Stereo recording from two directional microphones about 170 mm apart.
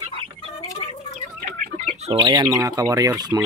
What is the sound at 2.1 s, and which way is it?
Speech, 30° right (ahead or behind).